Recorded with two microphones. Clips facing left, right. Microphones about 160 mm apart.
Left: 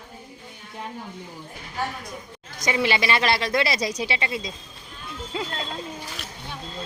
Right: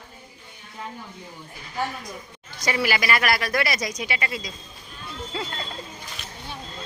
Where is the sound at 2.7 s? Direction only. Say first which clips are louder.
Left 1 dB; 20° left (ahead or behind).